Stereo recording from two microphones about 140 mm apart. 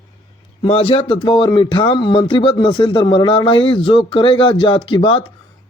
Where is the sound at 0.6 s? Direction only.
40° left (ahead or behind).